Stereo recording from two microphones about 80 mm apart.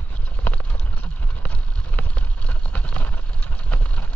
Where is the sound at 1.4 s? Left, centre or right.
Centre.